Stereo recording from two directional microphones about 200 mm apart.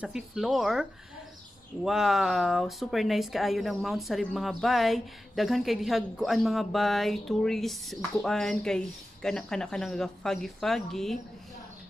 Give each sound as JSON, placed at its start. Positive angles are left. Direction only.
{"t": 0.0, "sound": "speech", "side_deg": -5}
{"t": 1.9, "sound": "speech", "side_deg": 0}